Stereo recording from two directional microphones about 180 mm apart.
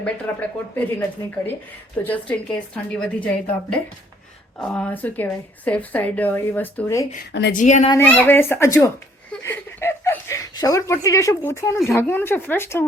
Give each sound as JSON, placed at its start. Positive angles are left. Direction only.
{"t": 0.0, "sound": "a woman's voice", "side_deg": 10}
{"t": 2.0, "sound": "a woman's voice", "side_deg": 5}
{"t": 7.5, "sound": "speech", "side_deg": 40}
{"t": 7.9, "sound": "a woman's voice", "side_deg": 10}
{"t": 9.4, "sound": "chuckle", "side_deg": 15}
{"t": 11.9, "sound": "a woman's voice", "side_deg": 10}